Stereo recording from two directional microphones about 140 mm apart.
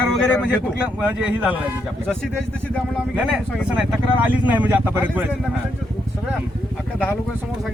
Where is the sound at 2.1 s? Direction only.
5° left (ahead or behind).